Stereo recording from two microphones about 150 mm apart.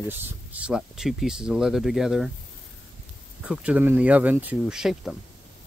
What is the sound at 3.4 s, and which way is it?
Speech, 5° right (ahead or behind).